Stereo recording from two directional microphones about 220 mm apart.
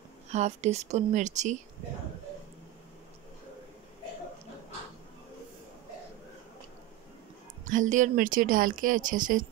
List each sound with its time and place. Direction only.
0.3 s speech: 30° right (ahead or behind)
7.6 s speech: 35° right (ahead or behind)